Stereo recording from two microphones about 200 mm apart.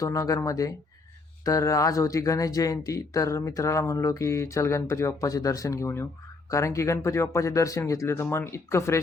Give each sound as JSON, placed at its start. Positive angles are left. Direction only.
{"t": 0.0, "sound": "speech", "side_deg": 15}